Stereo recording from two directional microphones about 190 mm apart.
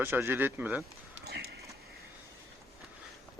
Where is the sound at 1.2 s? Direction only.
60° right (ahead or behind).